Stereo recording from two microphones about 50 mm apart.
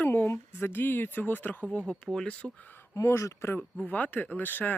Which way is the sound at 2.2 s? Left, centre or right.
Left.